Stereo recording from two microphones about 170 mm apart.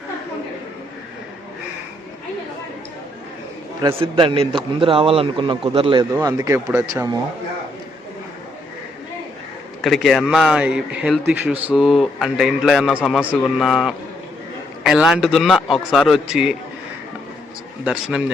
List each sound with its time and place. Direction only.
3.8 s a man's voice: 30° right (ahead or behind)
6.1 s speech: 20° right (ahead or behind)
9.8 s speech: centre (ahead or behind)
17.8 s speech: 5° right (ahead or behind)